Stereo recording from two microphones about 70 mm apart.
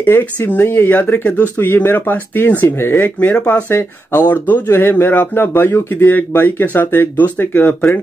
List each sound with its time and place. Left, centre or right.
0.0 s speech: left
3.7 s speech: left